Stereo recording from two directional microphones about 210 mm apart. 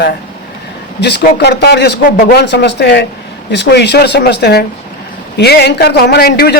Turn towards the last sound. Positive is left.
turn(degrees=50)  # may be behind; listen again after turning